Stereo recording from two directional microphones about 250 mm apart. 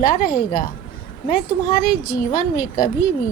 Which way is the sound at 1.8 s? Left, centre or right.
Left.